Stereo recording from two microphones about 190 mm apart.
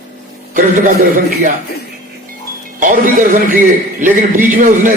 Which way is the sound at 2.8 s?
45° right (ahead or behind).